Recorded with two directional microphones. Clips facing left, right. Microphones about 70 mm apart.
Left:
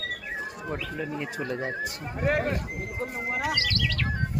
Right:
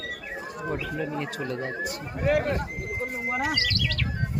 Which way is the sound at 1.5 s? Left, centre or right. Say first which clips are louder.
Left 3 dB; left.